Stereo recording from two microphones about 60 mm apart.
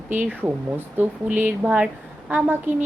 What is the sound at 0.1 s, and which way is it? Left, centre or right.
Speech, right.